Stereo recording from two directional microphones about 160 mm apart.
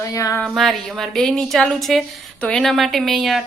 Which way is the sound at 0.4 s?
Centre (ahead or behind).